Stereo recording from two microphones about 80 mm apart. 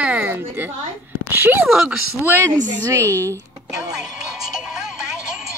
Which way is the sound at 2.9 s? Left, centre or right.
Right.